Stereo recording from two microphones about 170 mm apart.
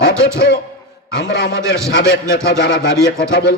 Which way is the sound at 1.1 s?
85° left.